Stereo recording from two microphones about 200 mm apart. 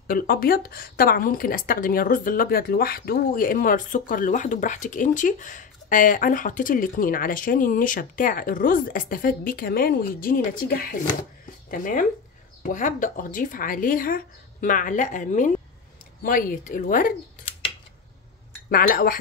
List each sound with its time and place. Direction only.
0.0 s speech: 45° left (ahead or behind)
18.7 s speech: 45° left (ahead or behind)